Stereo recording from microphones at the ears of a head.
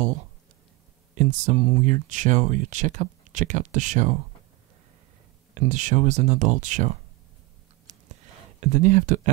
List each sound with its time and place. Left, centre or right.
1.1 s speech: right
5.5 s speech: right
7.8 s a sound: right